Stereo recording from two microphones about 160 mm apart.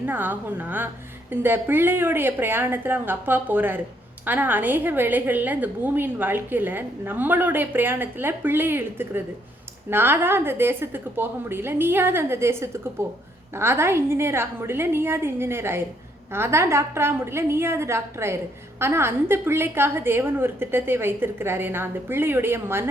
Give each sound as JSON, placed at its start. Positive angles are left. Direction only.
{"t": 0.0, "sound": "a woman's voice", "side_deg": -10}